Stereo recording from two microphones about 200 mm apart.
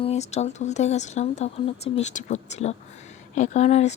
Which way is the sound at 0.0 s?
35° left (ahead or behind).